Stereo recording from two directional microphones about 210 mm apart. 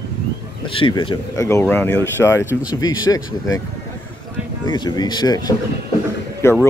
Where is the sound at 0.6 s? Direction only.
25° left (ahead or behind).